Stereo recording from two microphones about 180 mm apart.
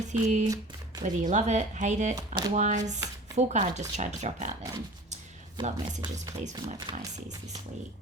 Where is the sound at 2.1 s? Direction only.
20° right (ahead or behind).